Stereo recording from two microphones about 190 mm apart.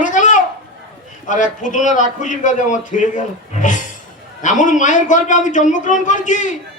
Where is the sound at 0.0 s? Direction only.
40° left (ahead or behind).